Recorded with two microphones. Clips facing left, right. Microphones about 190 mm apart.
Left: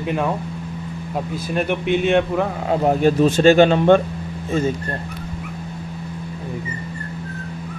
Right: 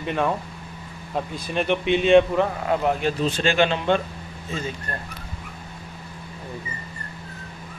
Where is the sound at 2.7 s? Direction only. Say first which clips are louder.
Left 6 dB; 35° left (ahead or behind).